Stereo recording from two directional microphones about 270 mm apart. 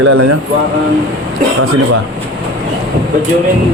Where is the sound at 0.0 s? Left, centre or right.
Right.